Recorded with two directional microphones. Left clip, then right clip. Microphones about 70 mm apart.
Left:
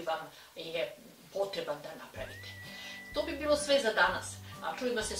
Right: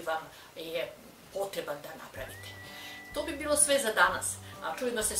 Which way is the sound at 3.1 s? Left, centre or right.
Right.